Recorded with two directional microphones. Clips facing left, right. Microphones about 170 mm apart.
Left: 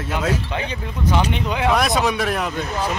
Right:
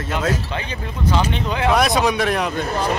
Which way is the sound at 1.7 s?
Centre (ahead or behind).